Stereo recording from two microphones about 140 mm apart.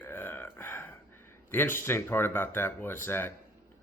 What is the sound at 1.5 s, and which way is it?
Speech, 15° left (ahead or behind).